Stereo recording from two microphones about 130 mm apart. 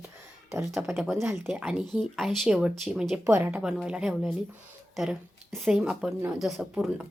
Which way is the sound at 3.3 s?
15° right (ahead or behind).